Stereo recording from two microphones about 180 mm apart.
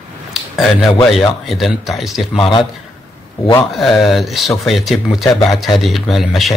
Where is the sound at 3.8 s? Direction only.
Centre (ahead or behind).